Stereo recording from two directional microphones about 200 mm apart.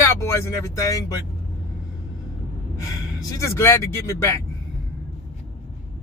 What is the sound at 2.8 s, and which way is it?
Speech, 15° left (ahead or behind).